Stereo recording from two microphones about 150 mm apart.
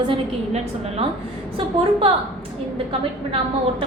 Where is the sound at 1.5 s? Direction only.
40° right (ahead or behind).